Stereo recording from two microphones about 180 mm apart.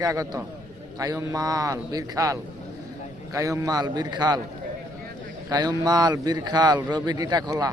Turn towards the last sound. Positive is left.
turn(degrees=-20)  # may be behind; listen again after turning